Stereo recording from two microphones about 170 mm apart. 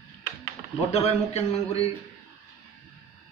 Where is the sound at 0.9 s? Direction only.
40° left (ahead or behind).